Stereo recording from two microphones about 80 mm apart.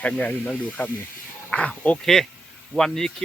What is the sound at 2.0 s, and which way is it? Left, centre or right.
Speech, centre.